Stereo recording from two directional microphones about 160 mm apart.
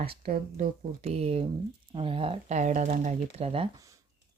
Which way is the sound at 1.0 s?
40° right (ahead or behind).